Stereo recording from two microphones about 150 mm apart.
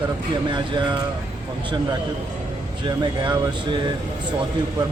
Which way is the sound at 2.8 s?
30° right (ahead or behind).